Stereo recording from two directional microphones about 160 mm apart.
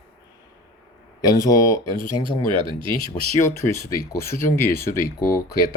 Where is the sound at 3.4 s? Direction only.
15° left (ahead or behind).